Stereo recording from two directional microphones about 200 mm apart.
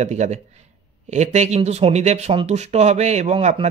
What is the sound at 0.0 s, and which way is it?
Speech, 35° right (ahead or behind).